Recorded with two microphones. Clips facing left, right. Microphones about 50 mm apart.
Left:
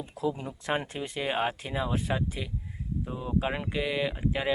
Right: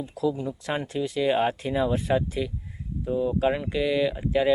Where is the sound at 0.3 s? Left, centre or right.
Left.